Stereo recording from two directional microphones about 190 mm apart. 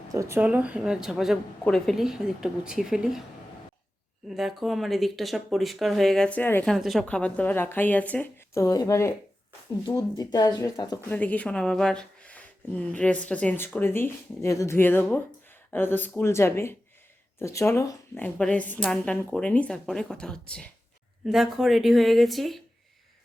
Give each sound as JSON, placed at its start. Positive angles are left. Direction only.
{"t": 0.1, "sound": "speech", "side_deg": -15}
{"t": 4.3, "sound": "speech", "side_deg": 0}
{"t": 11.1, "sound": "speech", "side_deg": 5}